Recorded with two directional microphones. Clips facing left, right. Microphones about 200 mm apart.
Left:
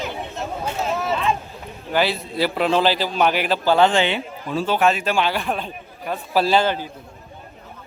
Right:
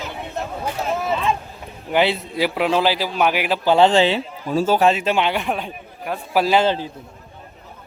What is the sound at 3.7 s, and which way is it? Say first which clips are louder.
Speech: right 5 dB; 30° right (ahead or behind).